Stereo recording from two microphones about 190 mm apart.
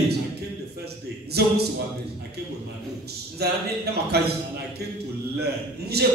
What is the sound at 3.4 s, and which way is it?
Speech, 60° right (ahead or behind).